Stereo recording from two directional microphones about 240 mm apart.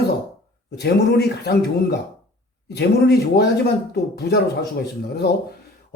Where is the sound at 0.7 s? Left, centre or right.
Left.